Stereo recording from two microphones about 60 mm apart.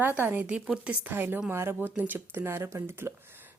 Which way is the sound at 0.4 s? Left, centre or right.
Centre.